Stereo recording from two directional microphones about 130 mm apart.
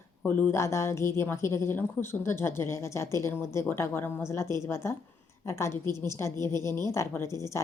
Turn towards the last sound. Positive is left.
turn(degrees=20)  # may be behind; listen again after turning